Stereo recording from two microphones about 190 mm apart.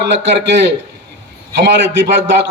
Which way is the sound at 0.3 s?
65° right (ahead or behind).